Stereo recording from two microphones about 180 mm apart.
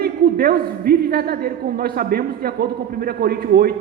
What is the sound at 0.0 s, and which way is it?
A man's voice, 55° right (ahead or behind).